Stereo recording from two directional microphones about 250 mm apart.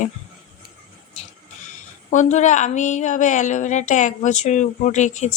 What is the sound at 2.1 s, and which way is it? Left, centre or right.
A woman's voice, left.